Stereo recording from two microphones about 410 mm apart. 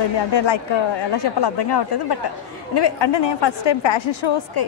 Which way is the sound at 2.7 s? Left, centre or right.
Left.